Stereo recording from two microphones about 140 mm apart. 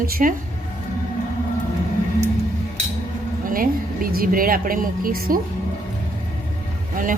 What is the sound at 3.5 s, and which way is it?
A woman's voice, 90° right.